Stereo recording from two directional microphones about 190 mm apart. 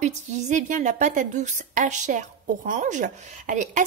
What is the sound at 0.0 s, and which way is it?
A woman's voice, 40° right (ahead or behind).